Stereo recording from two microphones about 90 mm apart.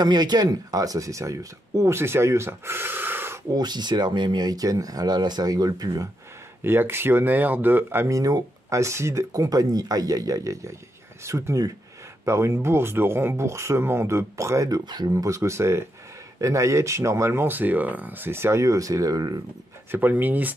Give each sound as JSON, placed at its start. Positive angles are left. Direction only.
{"t": 0.0, "sound": "speech", "side_deg": -50}
{"t": 3.5, "sound": "speech", "side_deg": -50}
{"t": 6.6, "sound": "speech", "side_deg": -25}
{"t": 8.2, "sound": "speech", "side_deg": -45}
{"t": 14.9, "sound": "speech", "side_deg": -50}
{"t": 19.9, "sound": "speech", "side_deg": -20}